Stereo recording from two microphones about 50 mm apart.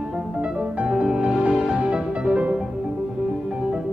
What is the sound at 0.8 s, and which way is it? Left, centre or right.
Music, right.